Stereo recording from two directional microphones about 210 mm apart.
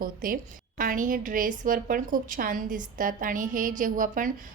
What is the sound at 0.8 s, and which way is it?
A woman's voice, 40° right (ahead or behind).